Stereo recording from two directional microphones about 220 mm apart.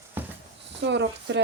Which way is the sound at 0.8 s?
50° right (ahead or behind).